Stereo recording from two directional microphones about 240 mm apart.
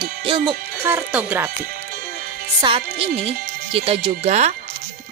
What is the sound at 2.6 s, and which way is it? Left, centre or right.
Speech, right.